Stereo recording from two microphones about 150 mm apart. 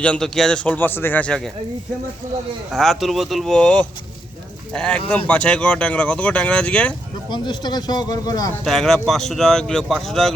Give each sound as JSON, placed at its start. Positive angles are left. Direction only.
{"t": 0.0, "sound": "speech", "side_deg": 5}
{"t": 2.7, "sound": "speech", "side_deg": 0}
{"t": 7.3, "sound": "speech", "side_deg": 30}
{"t": 8.6, "sound": "speech", "side_deg": 5}